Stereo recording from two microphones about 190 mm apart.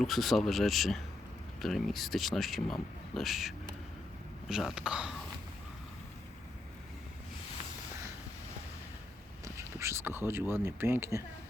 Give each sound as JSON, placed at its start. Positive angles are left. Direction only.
{"t": 0.0, "sound": "speech", "side_deg": 0}
{"t": 9.4, "sound": "speech", "side_deg": -15}